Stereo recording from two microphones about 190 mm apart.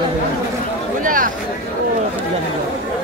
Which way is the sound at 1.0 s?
45° right (ahead or behind).